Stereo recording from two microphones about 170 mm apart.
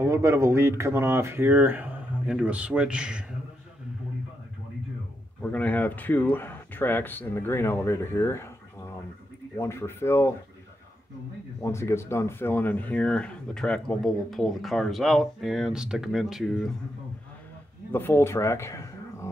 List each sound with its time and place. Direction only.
0.0 s speech: 15° right (ahead or behind)
5.4 s speech: 10° left (ahead or behind)
9.6 s speech: 15° left (ahead or behind)
11.6 s speech: 15° left (ahead or behind); by 16.7 s centre (ahead or behind)
17.9 s speech: 15° left (ahead or behind)